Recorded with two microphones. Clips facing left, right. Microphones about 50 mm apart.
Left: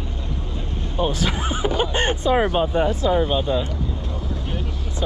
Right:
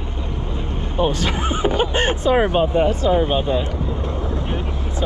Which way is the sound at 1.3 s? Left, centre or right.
Right.